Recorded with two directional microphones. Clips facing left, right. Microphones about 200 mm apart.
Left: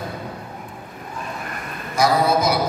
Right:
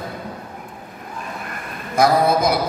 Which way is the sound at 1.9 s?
55° right (ahead or behind).